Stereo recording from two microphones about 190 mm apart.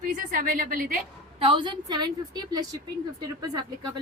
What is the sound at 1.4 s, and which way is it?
A woman's voice, 25° right (ahead or behind).